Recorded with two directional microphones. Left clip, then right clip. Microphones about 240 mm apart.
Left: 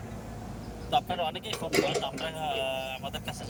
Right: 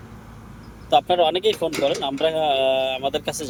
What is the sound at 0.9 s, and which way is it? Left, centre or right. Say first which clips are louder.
Speech: right 11 dB; right.